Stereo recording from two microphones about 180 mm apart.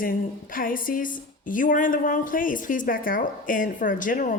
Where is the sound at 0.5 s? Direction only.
50° left (ahead or behind).